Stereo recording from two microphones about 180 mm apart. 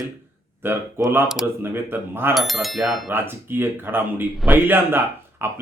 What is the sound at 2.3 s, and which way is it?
Speech, centre (ahead or behind).